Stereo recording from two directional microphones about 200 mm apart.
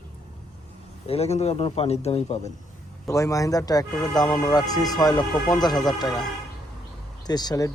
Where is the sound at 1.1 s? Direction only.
30° left (ahead or behind).